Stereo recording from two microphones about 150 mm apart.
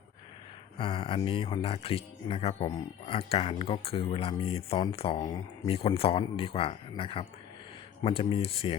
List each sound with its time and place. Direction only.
0.8 s speech: 35° left (ahead or behind)